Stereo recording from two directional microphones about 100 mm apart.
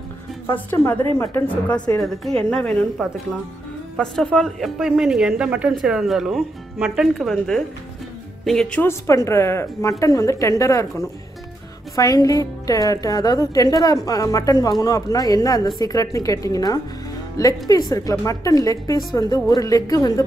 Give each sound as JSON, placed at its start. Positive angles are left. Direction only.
{"t": 0.5, "sound": "speech", "side_deg": 20}
{"t": 2.0, "sound": "a woman's voice", "side_deg": 5}
{"t": 3.9, "sound": "a woman's voice", "side_deg": 5}
{"t": 8.8, "sound": "a woman's voice", "side_deg": 30}